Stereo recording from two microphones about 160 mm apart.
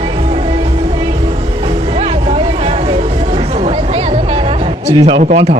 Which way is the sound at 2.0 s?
35° right (ahead or behind).